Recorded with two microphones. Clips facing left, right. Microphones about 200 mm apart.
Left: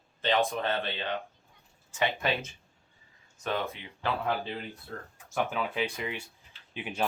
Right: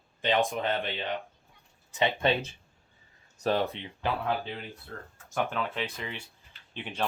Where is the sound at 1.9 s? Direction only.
30° right (ahead or behind).